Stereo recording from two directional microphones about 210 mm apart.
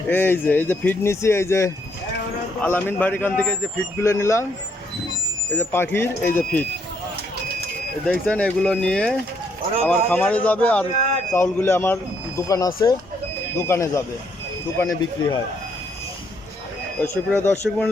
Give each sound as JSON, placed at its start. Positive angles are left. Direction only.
{"t": 0.1, "sound": "a man's voice", "side_deg": 10}
{"t": 5.5, "sound": "a man's voice", "side_deg": 10}
{"t": 8.0, "sound": "a man's voice", "side_deg": 5}
{"t": 17.0, "sound": "a man's voice", "side_deg": 10}